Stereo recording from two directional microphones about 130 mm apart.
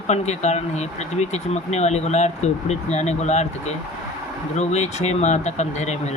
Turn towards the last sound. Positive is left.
turn(degrees=60)  # may be behind; listen again after turning